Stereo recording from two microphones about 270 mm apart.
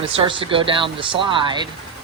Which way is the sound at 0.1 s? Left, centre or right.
Centre.